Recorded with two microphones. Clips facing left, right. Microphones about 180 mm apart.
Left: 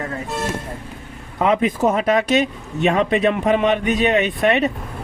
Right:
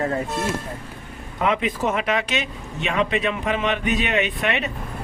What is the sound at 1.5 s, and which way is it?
Speech, 40° left (ahead or behind).